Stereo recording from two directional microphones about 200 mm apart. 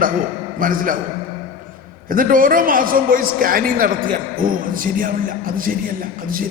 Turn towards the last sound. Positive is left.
turn(degrees=-45)  # may be behind; listen again after turning